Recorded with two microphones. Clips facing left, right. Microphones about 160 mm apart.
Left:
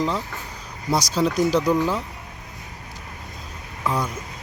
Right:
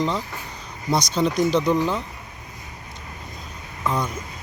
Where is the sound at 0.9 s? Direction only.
5° left (ahead or behind).